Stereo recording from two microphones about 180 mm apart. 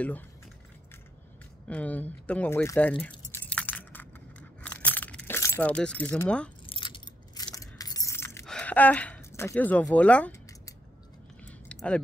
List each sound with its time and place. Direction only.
1.7 s speech: 10° left (ahead or behind)
3.0 s keys jangling: 10° left (ahead or behind)
6.6 s keys jangling: 30° left (ahead or behind)
8.5 s speech: 5° left (ahead or behind)
11.4 s a sound: 5° left (ahead or behind)